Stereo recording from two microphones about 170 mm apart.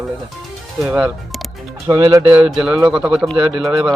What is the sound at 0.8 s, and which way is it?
Speech, 10° right (ahead or behind).